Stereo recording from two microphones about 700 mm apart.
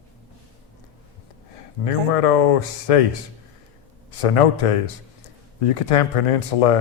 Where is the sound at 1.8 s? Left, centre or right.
Left.